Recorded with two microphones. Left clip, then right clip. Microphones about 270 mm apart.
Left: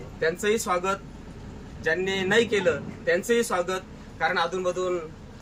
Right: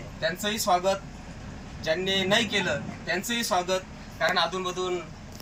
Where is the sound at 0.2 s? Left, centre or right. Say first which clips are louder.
Left 4 dB; centre.